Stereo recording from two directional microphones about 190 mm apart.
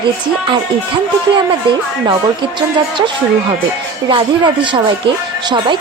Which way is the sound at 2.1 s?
25° right (ahead or behind).